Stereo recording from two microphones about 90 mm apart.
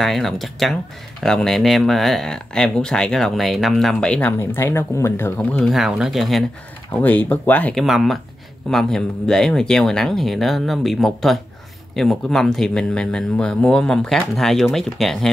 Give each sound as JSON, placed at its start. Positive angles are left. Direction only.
{"t": 0.0, "sound": "speech", "side_deg": 0}
{"t": 4.4, "sound": "speech", "side_deg": 25}
{"t": 5.4, "sound": "speech", "side_deg": 15}
{"t": 5.7, "sound": "speech", "side_deg": -5}
{"t": 6.9, "sound": "speech", "side_deg": 20}
{"t": 7.7, "sound": "speech", "side_deg": 0}